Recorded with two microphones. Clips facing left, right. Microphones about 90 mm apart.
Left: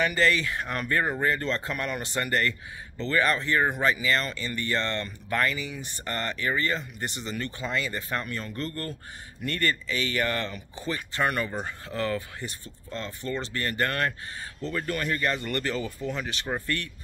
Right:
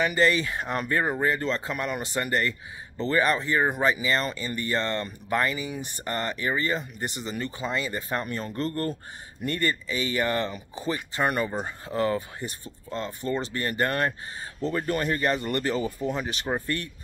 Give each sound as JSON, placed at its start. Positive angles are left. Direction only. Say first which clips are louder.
{"t": 0.0, "sound": "speech", "louder": "right 1 dB", "side_deg": -20}
{"t": 7.7, "sound": "speech", "louder": "even", "side_deg": -25}